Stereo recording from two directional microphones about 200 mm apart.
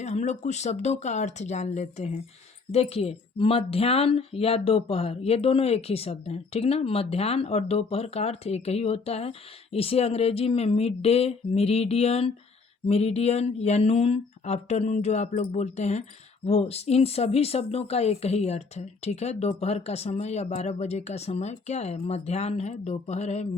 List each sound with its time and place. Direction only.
0.0 s speech: 35° left (ahead or behind)